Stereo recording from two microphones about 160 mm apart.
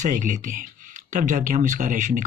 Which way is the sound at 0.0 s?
50° right (ahead or behind).